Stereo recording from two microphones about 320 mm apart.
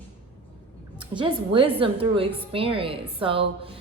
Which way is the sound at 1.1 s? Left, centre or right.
Centre.